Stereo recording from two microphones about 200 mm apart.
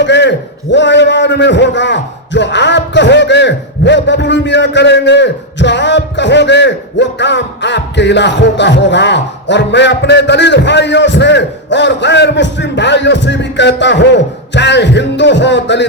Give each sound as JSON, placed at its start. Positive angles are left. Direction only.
{"t": 0.0, "sound": "a man's voice", "side_deg": 60}